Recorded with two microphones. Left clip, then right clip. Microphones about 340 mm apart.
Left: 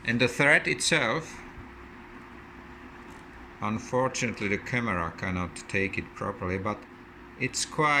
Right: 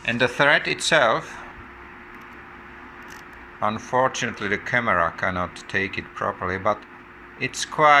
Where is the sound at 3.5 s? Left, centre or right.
Centre.